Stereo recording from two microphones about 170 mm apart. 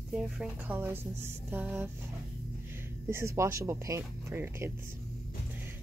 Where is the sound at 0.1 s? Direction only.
5° right (ahead or behind).